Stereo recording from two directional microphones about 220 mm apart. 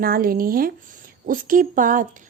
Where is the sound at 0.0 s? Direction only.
40° right (ahead or behind).